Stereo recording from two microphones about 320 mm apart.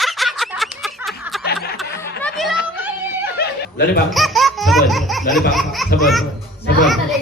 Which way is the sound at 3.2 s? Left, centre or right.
Left.